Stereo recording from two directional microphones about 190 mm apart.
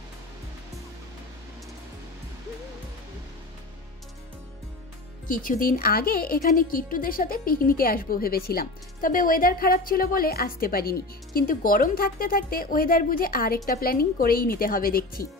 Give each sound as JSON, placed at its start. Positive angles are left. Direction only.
{"t": 5.3, "sound": "a woman's voice", "side_deg": 45}